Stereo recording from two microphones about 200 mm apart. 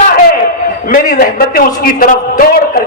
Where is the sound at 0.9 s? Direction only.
45° left (ahead or behind).